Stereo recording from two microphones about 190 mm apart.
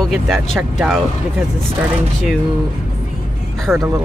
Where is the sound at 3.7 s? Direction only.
10° right (ahead or behind).